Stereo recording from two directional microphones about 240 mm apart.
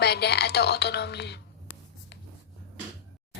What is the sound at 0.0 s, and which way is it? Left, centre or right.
A woman's voice, left.